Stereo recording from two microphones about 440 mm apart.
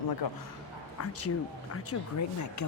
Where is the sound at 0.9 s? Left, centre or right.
Left.